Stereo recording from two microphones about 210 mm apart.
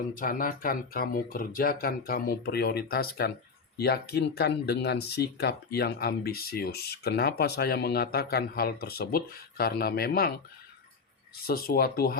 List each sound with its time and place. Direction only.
0.1 s speech: 40° left (ahead or behind)
11.4 s speech: 45° left (ahead or behind)